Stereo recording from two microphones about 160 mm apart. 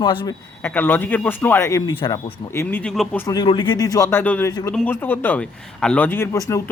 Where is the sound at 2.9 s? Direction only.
Centre (ahead or behind).